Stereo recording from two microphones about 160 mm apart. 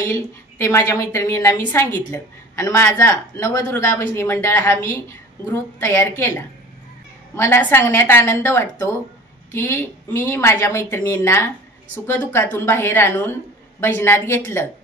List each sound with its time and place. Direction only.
0.0 s a woman's voice: 20° left (ahead or behind)
7.3 s a woman's voice: 15° left (ahead or behind)